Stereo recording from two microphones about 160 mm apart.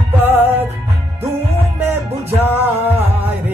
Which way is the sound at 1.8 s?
15° right (ahead or behind).